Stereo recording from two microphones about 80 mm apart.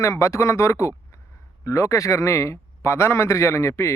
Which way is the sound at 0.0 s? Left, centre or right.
Left.